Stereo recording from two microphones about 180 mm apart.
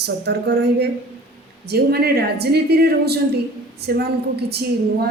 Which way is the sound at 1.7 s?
60° right (ahead or behind).